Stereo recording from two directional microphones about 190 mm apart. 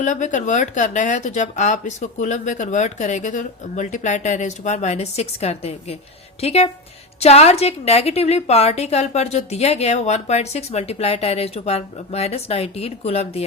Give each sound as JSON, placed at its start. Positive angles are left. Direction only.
{"t": 0.0, "sound": "a woman's voice", "side_deg": 40}